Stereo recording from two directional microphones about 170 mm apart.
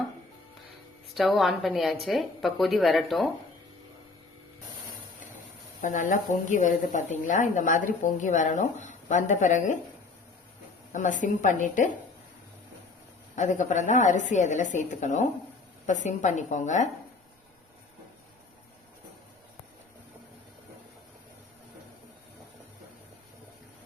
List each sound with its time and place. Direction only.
1.1 s speech: centre (ahead or behind)
5.8 s speech: 50° left (ahead or behind)
10.9 s speech: 45° left (ahead or behind)
13.3 s speech: 45° left (ahead or behind)